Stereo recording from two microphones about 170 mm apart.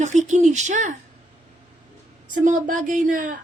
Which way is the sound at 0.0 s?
45° right (ahead or behind).